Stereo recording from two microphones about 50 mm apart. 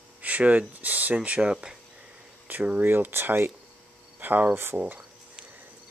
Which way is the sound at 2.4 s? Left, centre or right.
Right.